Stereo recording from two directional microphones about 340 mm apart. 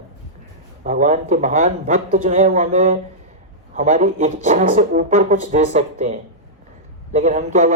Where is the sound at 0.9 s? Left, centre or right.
Right.